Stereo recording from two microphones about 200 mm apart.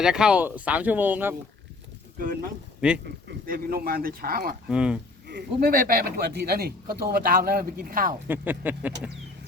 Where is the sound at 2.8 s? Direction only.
5° right (ahead or behind).